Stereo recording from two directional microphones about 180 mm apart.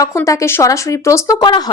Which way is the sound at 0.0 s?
15° left (ahead or behind).